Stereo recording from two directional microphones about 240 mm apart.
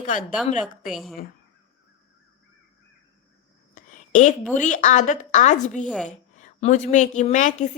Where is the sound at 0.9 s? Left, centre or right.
Centre.